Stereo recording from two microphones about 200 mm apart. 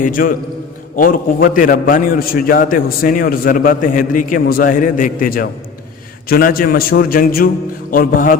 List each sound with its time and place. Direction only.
0.0 s a man's voice: 45° left (ahead or behind)